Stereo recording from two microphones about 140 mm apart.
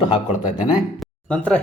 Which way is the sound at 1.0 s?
10° left (ahead or behind).